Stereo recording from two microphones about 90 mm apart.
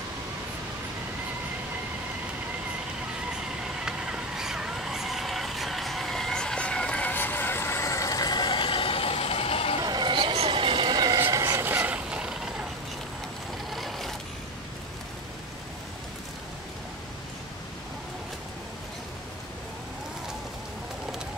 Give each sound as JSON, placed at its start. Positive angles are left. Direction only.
{"t": 3.8, "sound": "vehicle", "side_deg": -10}
{"t": 9.8, "sound": "a sound", "side_deg": -50}
{"t": 11.1, "sound": "vehicle", "side_deg": -35}
{"t": 11.6, "sound": "vehicle", "side_deg": -20}
{"t": 12.1, "sound": "vehicle", "side_deg": -10}
{"t": 13.7, "sound": "vehicle", "side_deg": 0}